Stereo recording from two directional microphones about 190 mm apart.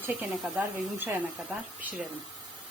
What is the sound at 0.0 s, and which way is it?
Speech, 5° right (ahead or behind).